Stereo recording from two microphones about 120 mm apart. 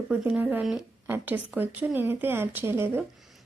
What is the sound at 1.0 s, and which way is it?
A woman's voice, 15° right (ahead or behind).